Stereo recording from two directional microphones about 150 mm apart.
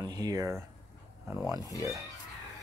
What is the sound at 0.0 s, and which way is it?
Speech, 25° right (ahead or behind).